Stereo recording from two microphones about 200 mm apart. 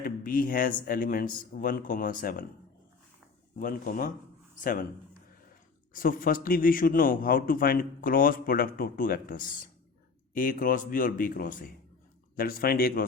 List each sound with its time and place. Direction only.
0.0 s a man's voice: 45° left (ahead or behind)
3.6 s a man's voice: 40° left (ahead or behind)
5.9 s a man's voice: 45° left (ahead or behind)